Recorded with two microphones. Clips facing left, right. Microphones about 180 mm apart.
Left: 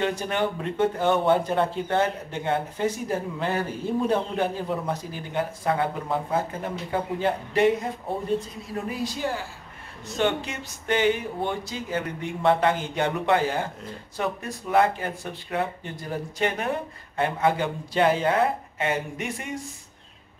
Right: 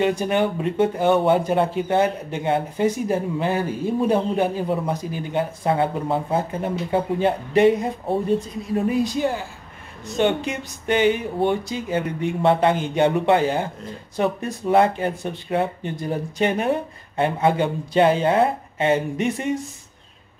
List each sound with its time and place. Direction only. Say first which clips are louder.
0.0 s speech: right 5 dB; 15° right (ahead or behind)